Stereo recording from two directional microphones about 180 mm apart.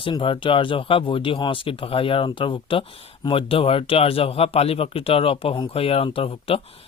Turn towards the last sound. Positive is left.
turn(degrees=30)  # may be behind; listen again after turning